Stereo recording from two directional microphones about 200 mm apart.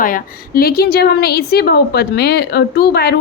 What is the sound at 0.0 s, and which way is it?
A woman's voice, 45° left (ahead or behind).